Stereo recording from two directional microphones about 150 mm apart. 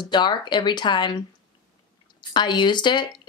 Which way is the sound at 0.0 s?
30° left (ahead or behind).